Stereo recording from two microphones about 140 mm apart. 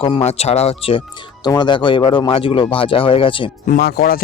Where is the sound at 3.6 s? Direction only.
90° left.